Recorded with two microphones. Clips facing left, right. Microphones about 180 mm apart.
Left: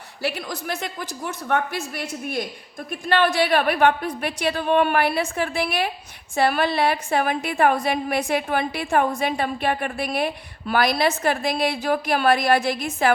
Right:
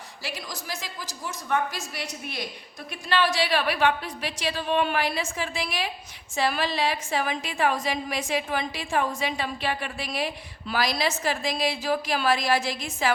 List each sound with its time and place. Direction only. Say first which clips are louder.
0.2 s a woman's voice: left 9 dB; 60° left (ahead or behind)